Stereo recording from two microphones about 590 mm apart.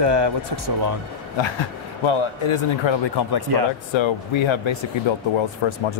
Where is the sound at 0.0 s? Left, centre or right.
Right.